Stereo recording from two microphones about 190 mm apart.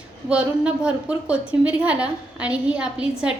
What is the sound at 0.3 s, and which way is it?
A woman's voice, 5° right (ahead or behind).